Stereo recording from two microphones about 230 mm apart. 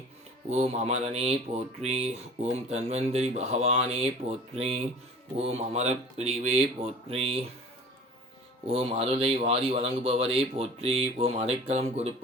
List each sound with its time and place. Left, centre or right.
0.5 s speech: right
8.6 s speech: right